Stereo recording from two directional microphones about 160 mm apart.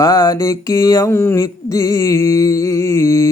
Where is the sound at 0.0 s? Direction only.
20° left (ahead or behind).